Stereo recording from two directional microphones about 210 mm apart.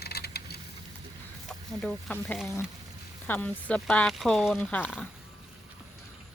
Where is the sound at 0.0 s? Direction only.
50° left (ahead or behind).